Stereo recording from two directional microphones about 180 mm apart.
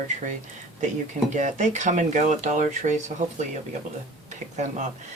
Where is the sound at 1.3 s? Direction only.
40° right (ahead or behind).